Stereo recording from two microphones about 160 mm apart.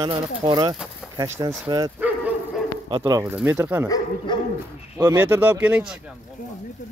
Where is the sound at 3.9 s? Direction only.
30° left (ahead or behind).